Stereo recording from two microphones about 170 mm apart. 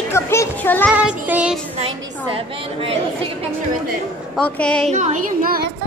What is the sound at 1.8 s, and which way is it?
A woman's voice, 35° right (ahead or behind).